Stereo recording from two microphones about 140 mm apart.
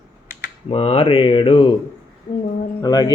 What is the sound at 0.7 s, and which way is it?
Speech, 45° left (ahead or behind).